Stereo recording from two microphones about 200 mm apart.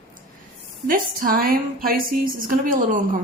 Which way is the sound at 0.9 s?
45° right (ahead or behind).